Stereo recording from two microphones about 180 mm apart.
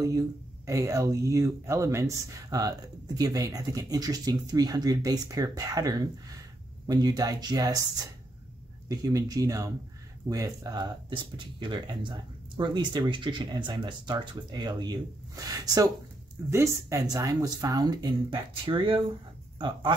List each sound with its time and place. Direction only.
0.7 s speech: 15° right (ahead or behind)
8.8 s speech: 20° right (ahead or behind)